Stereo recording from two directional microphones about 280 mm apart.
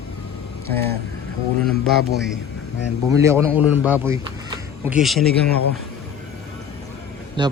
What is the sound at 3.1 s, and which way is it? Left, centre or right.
A man's voice, centre.